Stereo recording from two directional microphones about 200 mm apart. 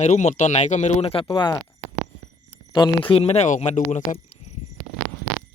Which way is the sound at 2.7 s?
25° left (ahead or behind).